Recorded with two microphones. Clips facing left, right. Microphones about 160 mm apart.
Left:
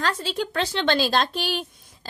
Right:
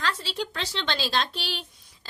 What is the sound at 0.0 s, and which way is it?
A woman's voice, 50° left (ahead or behind).